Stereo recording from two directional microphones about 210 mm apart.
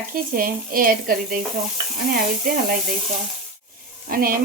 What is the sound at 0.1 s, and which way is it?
A woman's voice, 45° right (ahead or behind).